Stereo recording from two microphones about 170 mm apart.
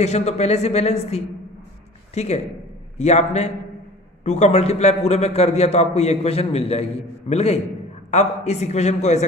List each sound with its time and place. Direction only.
0.0 s a man's voice: 40° left (ahead or behind)